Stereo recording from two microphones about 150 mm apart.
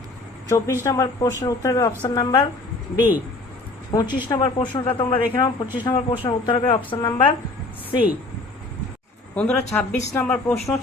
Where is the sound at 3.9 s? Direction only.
25° left (ahead or behind).